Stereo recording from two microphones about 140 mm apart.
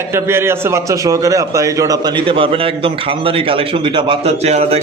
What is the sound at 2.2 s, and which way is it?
A man's voice, 40° right (ahead or behind).